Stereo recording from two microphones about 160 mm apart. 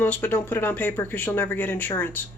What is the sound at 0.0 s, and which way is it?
Speech, 10° left (ahead or behind).